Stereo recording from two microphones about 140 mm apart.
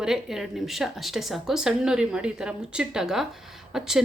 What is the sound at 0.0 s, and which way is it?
A woman's voice, 5° right (ahead or behind).